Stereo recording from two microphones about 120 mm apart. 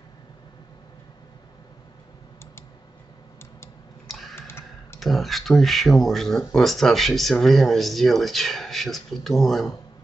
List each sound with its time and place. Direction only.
4.1 s typing: centre (ahead or behind)
4.4 s clicking: 20° left (ahead or behind)
5.0 s speech: centre (ahead or behind)